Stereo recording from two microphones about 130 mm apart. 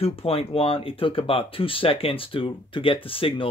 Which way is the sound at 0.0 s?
50° left (ahead or behind).